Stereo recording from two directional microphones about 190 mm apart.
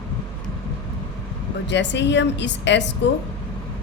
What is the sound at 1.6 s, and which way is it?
A woman's voice, 65° left (ahead or behind).